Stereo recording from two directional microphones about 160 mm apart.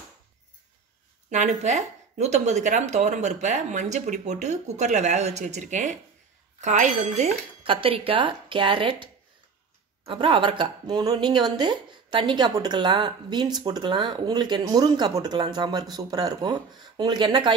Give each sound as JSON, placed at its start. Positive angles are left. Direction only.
{"t": 1.3, "sound": "a woman's voice", "side_deg": -45}